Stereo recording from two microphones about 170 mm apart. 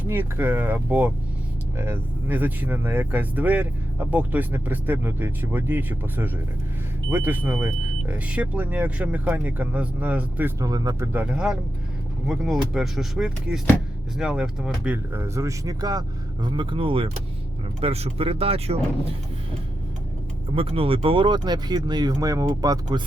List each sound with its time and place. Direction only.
0.0 s speech: 15° right (ahead or behind)
10.6 s speech: 20° right (ahead or behind)
11.1 s speech: 10° right (ahead or behind); by 18.8 s 35° right (ahead or behind)
20.6 s speech: 35° right (ahead or behind)